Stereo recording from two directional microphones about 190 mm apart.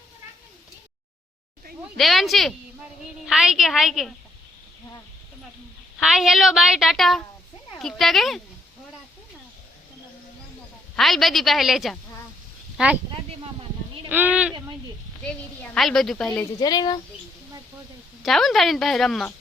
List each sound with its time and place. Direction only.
2.0 s a woman's voice: centre (ahead or behind)
6.0 s a woman's voice: centre (ahead or behind)
10.9 s a woman's voice: centre (ahead or behind)
13.4 s a sound: 30° right (ahead or behind)
14.1 s speech: 10° right (ahead or behind)
15.7 s a woman's voice: centre (ahead or behind)
16.6 s speech: 20° left (ahead or behind)
18.2 s a woman's voice: centre (ahead or behind)